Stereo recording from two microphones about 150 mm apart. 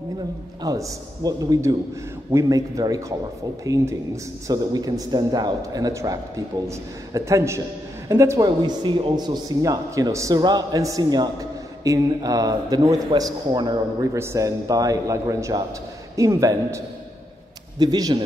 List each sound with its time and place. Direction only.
0.6 s a man's voice: 20° right (ahead or behind)